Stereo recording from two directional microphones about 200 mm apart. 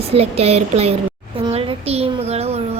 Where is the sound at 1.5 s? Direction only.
30° right (ahead or behind).